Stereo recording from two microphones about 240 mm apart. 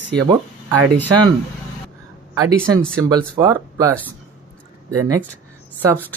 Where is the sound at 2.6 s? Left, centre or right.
Centre.